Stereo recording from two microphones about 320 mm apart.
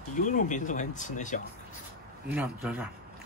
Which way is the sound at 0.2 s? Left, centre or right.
Left.